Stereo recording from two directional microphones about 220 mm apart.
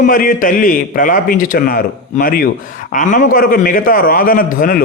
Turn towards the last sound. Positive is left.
turn(degrees=40)  # may be behind; listen again after turning